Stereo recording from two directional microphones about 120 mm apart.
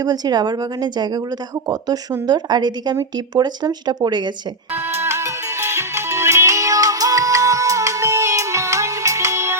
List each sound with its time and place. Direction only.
0.0 s speech: 35° right (ahead or behind)
4.7 s music: 20° right (ahead or behind)